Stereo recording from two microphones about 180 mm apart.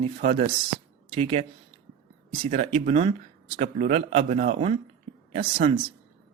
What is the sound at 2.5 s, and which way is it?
Speech, 40° right (ahead or behind).